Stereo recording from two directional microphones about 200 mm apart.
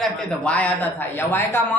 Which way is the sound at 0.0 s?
5° left (ahead or behind).